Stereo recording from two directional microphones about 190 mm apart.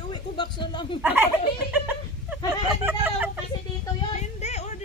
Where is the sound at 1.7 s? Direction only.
5° right (ahead or behind).